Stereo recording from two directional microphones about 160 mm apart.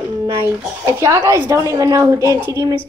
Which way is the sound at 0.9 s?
20° right (ahead or behind).